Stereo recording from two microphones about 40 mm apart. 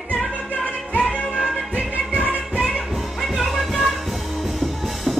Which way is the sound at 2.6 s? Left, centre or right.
Centre.